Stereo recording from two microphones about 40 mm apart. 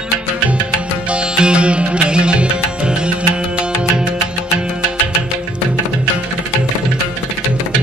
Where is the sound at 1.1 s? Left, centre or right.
Right.